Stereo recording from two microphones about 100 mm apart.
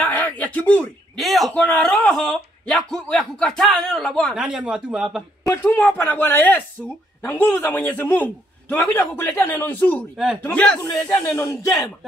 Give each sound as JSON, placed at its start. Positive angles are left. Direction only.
{"t": 0.0, "sound": "a sound", "side_deg": 15}
{"t": 1.1, "sound": "speech", "side_deg": 0}
{"t": 4.4, "sound": "a man's voice", "side_deg": -10}
{"t": 5.5, "sound": "a man's voice", "side_deg": 20}
{"t": 10.1, "sound": "speech", "side_deg": -5}
{"t": 10.4, "sound": "a man's voice", "side_deg": 10}
{"t": 10.9, "sound": "speech", "side_deg": 35}